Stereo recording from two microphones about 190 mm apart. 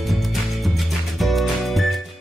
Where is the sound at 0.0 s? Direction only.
Centre (ahead or behind).